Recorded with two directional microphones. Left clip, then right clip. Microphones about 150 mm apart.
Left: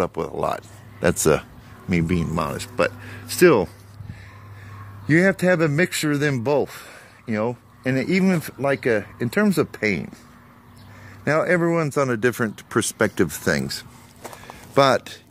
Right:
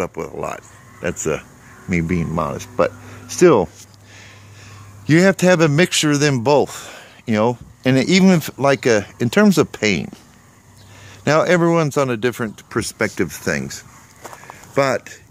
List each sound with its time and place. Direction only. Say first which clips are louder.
0.1 s speech: left 2 dB; 10° left (ahead or behind)
1.9 s speech: right 2 dB; 15° right (ahead or behind)
5.0 s a man's voice: right 4 dB; 30° right (ahead or behind)
11.2 s a man's voice: right 5 dB; 30° right (ahead or behind)
12.2 s speech: even; centre (ahead or behind)
13.4 s speech: even; centre (ahead or behind)
14.3 s a sound: even; 5° left (ahead or behind)